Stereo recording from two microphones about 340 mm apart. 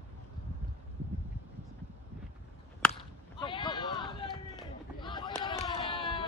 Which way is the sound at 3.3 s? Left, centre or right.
Centre.